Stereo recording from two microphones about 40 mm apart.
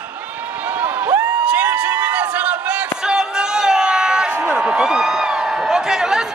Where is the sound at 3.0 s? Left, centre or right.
Centre.